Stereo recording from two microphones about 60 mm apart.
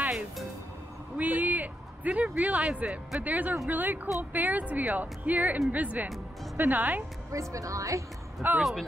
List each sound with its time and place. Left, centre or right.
1.1 s a sound: right
3.2 s a woman's voice: right
7.3 s speech: right
8.4 s a woman's voice: right